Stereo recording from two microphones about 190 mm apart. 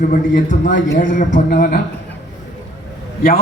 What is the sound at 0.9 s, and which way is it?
Speech, 45° left (ahead or behind).